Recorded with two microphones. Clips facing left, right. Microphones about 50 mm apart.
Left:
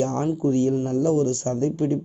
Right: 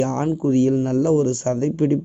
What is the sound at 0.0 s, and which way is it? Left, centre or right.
Speech, right.